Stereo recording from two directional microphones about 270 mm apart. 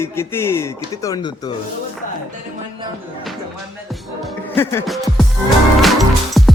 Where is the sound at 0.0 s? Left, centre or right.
Centre.